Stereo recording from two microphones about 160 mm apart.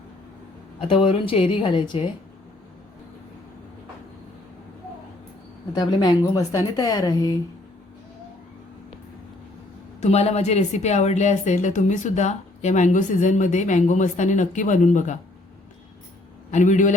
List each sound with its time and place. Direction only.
0.8 s a woman's voice: 35° left (ahead or behind)
5.7 s a woman's voice: 25° left (ahead or behind)
10.0 s speech: 40° left (ahead or behind)
16.5 s speech: 50° left (ahead or behind)